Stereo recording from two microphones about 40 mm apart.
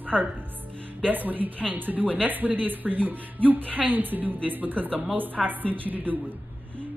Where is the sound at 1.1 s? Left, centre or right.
Right.